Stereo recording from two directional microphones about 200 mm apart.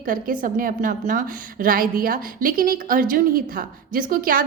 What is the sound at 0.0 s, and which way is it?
A woman's voice, 45° right (ahead or behind).